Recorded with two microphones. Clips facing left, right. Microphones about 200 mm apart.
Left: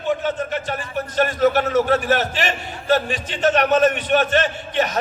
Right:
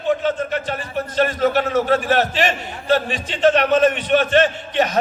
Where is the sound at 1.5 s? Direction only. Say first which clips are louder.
Even; 45° left (ahead or behind).